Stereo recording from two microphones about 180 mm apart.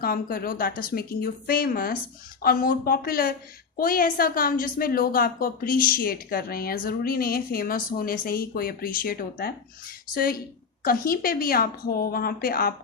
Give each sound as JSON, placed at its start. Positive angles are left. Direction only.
{"t": 0.0, "sound": "a woman's voice", "side_deg": 55}